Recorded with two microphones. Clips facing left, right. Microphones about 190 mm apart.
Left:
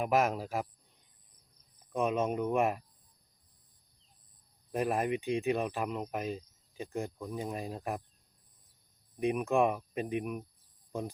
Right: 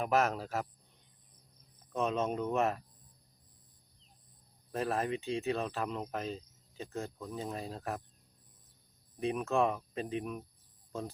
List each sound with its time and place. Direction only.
0.0 s speech: 10° left (ahead or behind)
1.9 s speech: 10° left (ahead or behind)
4.7 s speech: 15° left (ahead or behind)
9.2 s speech: 15° left (ahead or behind)